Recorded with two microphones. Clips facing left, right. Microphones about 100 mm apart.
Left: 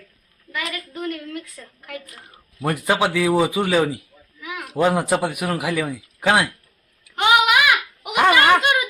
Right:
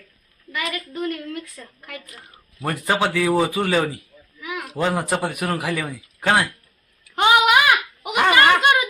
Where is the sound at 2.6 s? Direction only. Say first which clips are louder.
Left 1 dB; 15° left (ahead or behind).